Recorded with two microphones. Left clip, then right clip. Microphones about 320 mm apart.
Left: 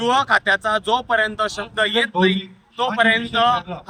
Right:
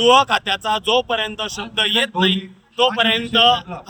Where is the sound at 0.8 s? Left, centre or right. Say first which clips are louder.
Even; centre.